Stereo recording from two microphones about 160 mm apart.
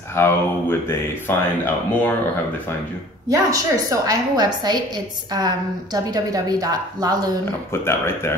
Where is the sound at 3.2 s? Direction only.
20° right (ahead or behind).